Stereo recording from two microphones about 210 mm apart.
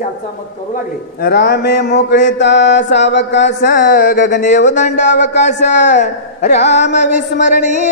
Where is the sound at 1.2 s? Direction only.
50° left (ahead or behind).